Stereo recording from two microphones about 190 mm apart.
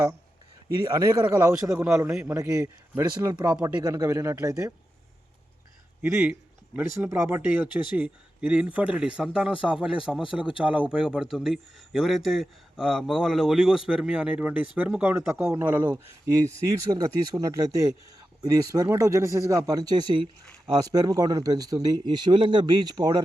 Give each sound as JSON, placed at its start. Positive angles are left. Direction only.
{"t": 0.8, "sound": "speech", "side_deg": -15}
{"t": 2.3, "sound": "speech", "side_deg": -15}
{"t": 6.0, "sound": "speech", "side_deg": -10}